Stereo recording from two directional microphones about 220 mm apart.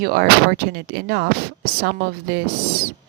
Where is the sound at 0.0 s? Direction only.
45° right (ahead or behind).